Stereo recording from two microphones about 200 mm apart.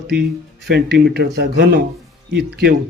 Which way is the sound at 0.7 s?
55° right (ahead or behind).